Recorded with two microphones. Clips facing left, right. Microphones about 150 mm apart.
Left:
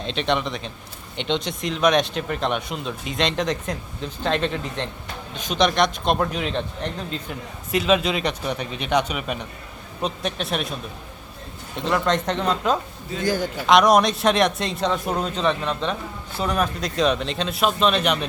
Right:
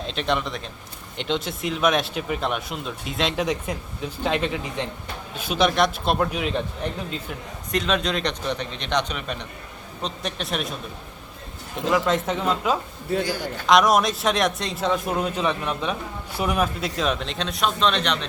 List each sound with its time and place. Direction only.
0.0 s speech: centre (ahead or behind)
7.7 s a man's voice: 5° left (ahead or behind)
12.0 s speech: 5° right (ahead or behind)
13.2 s a man's voice: 50° left (ahead or behind)
13.7 s speech: centre (ahead or behind)